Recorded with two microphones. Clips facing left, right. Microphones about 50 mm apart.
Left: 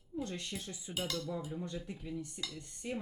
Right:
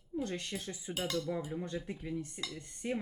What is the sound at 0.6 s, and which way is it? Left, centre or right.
Speech, right.